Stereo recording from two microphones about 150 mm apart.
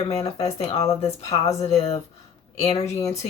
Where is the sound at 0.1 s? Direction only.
45° left (ahead or behind).